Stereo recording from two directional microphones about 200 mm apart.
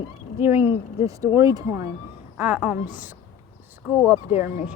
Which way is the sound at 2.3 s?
5° right (ahead or behind).